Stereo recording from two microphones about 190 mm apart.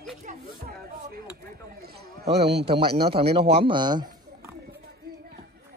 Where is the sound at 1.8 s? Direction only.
60° right (ahead or behind).